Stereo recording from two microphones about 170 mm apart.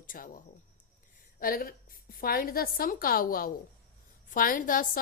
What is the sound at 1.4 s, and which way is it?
A woman's voice, 60° left (ahead or behind).